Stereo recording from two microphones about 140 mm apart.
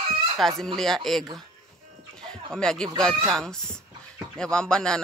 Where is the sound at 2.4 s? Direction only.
5° left (ahead or behind).